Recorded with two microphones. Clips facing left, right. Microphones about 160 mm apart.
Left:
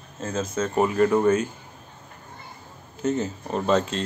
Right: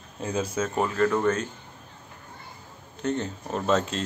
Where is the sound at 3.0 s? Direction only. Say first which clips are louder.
Left 3 dB; 5° left (ahead or behind).